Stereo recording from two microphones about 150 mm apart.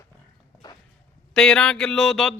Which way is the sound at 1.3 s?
5° left (ahead or behind).